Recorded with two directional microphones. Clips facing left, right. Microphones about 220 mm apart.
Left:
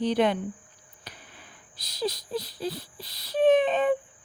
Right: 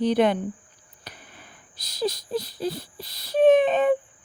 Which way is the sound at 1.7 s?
45° right (ahead or behind).